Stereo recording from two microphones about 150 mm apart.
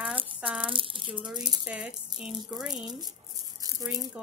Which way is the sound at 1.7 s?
5° right (ahead or behind).